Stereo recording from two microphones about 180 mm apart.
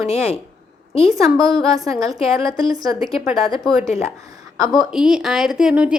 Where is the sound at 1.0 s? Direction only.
Centre (ahead or behind).